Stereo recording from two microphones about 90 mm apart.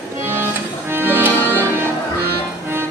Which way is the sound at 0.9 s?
25° right (ahead or behind).